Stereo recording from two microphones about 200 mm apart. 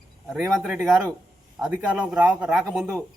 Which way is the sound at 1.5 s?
5° right (ahead or behind).